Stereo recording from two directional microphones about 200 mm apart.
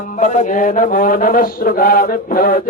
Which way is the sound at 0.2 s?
40° left (ahead or behind).